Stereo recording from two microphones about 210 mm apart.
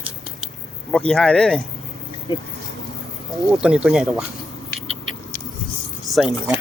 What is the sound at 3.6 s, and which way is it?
Speech, 5° right (ahead or behind).